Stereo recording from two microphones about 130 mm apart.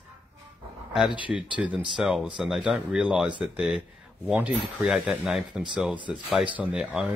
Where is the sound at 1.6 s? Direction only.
10° right (ahead or behind).